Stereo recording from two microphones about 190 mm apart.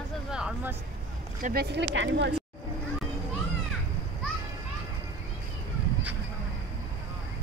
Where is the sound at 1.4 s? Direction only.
55° right (ahead or behind).